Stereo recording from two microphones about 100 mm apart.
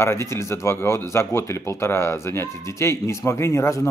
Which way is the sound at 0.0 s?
25° left (ahead or behind).